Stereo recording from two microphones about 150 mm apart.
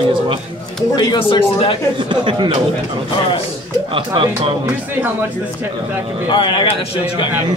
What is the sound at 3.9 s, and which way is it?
Speech, 35° right (ahead or behind).